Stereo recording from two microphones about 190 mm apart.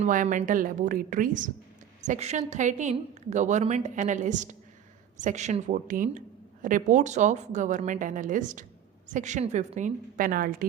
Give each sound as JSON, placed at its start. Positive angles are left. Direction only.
{"t": 0.0, "sound": "a woman's voice", "side_deg": -45}